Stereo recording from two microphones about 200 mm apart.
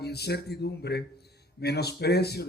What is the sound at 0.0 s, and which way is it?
Speech, 55° left (ahead or behind).